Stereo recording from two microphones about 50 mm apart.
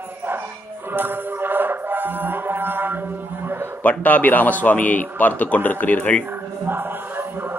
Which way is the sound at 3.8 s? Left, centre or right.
Left.